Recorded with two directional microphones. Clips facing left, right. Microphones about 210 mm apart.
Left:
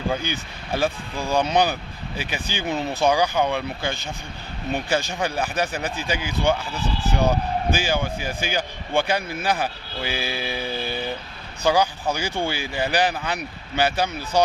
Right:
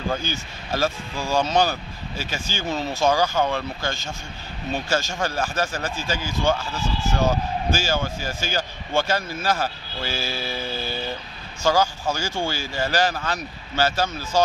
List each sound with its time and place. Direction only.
0.1 s speech: 15° left (ahead or behind)